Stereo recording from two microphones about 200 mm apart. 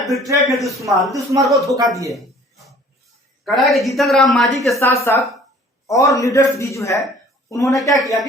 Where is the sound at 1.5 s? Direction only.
15° right (ahead or behind).